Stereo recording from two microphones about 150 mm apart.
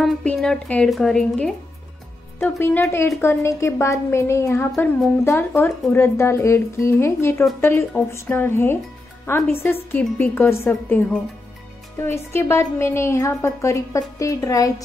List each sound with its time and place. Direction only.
0.0 s a woman's voice: 5° left (ahead or behind)
2.6 s a woman's voice: 15° left (ahead or behind)